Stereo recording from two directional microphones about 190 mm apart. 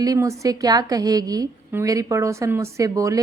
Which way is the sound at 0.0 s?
15° right (ahead or behind).